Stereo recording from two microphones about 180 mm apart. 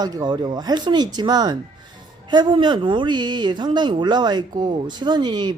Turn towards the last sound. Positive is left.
turn(degrees=-25)  # may be behind; listen again after turning